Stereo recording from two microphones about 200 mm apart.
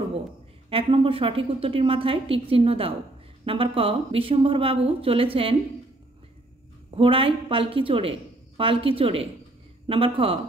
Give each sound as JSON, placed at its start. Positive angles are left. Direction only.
{"t": 0.7, "sound": "a woman's voice", "side_deg": -25}
{"t": 7.0, "sound": "a woman's voice", "side_deg": -25}